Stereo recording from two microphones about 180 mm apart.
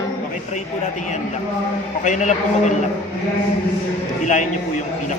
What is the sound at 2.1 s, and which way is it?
Speech, 40° left (ahead or behind).